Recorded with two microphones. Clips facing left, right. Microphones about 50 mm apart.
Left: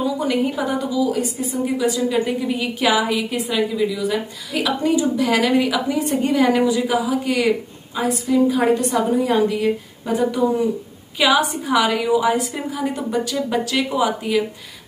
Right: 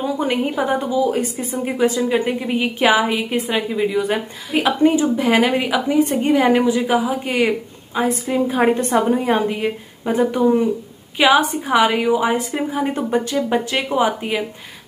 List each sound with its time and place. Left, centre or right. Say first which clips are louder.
0.0 s a woman's voice: even; right